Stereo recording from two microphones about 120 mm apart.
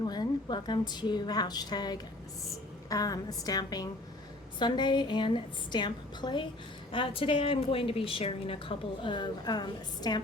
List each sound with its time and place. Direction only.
0.0 s a woman's voice: 35° left (ahead or behind)